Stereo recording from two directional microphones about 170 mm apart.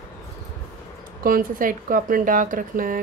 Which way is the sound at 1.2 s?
60° right (ahead or behind).